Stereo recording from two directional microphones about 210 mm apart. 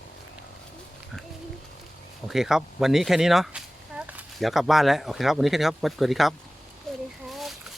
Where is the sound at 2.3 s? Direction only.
Centre (ahead or behind).